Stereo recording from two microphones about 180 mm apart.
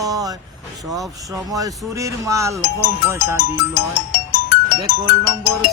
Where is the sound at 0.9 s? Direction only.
Centre (ahead or behind).